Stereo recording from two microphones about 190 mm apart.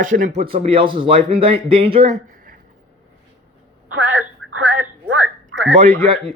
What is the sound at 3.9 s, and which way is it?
Telephone, 90° right.